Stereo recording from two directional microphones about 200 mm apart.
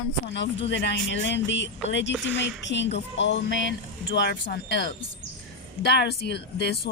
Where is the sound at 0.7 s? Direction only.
60° left (ahead or behind).